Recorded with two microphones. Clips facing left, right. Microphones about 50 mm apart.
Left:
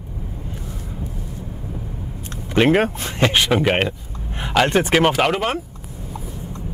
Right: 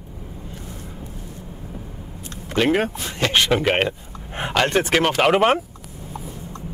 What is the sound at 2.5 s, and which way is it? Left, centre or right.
Speech, left.